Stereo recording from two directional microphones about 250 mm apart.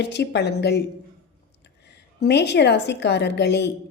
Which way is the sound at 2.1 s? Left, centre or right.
Left.